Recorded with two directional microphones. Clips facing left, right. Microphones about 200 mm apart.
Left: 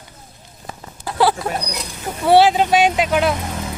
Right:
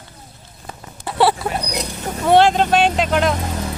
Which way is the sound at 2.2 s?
5° left (ahead or behind).